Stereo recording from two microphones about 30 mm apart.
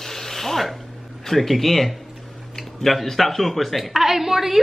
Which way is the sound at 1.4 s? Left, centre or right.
Centre.